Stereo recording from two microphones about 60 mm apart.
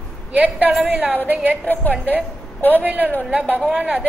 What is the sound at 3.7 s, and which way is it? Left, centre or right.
Speech, centre.